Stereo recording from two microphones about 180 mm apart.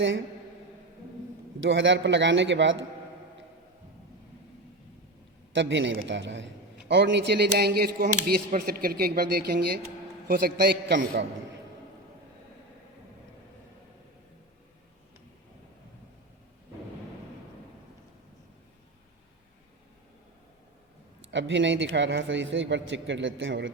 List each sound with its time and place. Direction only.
1.6 s a man's voice: 90° right
5.5 s a man's voice: 75° right (ahead or behind); by 8.1 s 60° right (ahead or behind)
8.4 s speech: 50° right (ahead or behind); by 11.3 s 70° right (ahead or behind)
21.2 s a man's voice: 90° right